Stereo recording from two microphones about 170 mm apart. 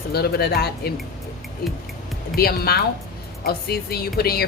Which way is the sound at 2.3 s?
65° left (ahead or behind).